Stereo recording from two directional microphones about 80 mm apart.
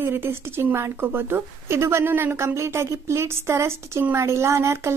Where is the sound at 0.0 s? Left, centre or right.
Right.